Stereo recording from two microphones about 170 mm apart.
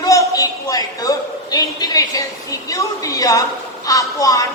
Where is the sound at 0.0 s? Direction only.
20° left (ahead or behind).